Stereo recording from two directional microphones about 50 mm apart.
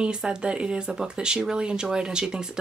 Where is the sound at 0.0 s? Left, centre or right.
Centre.